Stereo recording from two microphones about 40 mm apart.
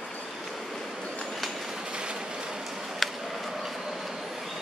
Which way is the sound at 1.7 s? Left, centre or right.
Centre.